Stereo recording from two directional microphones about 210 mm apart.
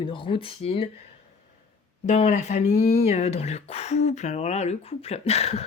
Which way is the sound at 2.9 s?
30° left (ahead or behind).